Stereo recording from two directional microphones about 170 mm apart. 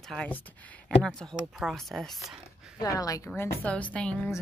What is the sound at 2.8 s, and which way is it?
A woman's voice, 20° left (ahead or behind).